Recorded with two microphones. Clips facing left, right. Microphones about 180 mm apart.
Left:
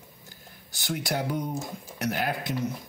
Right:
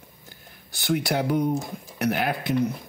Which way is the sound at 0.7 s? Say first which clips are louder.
Right 6 dB; 60° right (ahead or behind).